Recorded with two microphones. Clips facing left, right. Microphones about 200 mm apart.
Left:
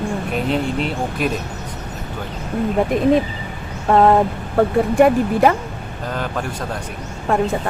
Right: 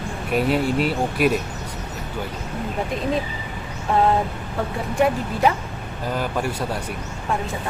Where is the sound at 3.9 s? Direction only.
60° left (ahead or behind).